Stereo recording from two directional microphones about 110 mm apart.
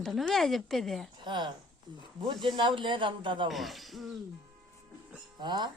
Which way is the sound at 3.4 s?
Centre (ahead or behind).